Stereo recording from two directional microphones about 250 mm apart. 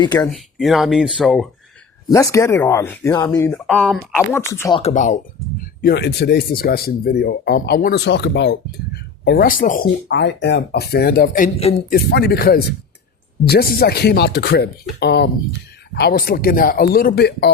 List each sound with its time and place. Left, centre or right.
0.0 s speech: centre
0.3 s speech: centre
2.0 s speech: centre
4.8 s speech: left
5.8 s speech: left